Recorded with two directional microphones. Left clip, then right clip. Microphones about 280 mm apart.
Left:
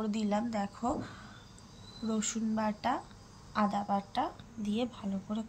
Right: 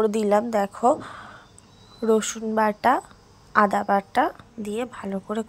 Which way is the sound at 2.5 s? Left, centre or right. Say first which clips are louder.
Right 15 dB; right.